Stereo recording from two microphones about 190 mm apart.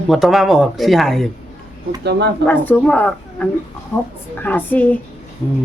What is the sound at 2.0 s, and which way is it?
Speech, 60° right (ahead or behind).